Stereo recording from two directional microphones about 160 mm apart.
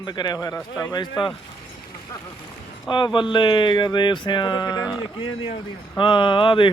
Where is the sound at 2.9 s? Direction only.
30° left (ahead or behind).